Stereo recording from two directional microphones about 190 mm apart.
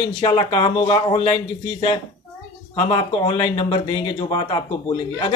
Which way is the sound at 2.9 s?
25° left (ahead or behind).